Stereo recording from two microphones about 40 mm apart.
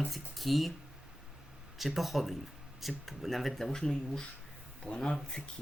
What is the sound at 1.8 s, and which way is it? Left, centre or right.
Speech, centre.